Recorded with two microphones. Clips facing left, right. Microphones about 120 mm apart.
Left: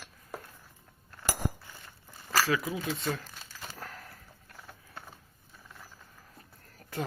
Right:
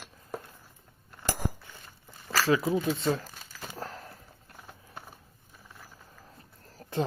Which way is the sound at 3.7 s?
30° right (ahead or behind).